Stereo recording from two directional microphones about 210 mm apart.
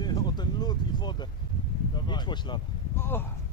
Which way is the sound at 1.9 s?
20° left (ahead or behind).